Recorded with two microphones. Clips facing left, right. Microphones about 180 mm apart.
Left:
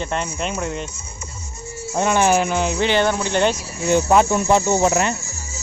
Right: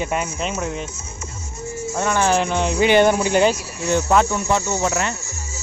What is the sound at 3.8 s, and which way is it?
Cricket, 15° left (ahead or behind).